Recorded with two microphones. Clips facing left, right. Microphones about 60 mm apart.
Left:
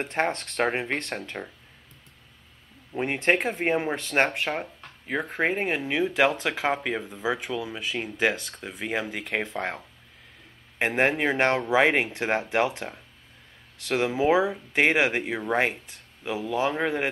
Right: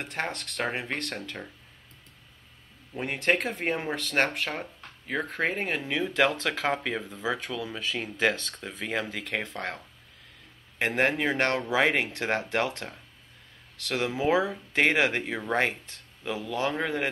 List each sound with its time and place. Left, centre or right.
0.0 s speech: left
2.9 s speech: left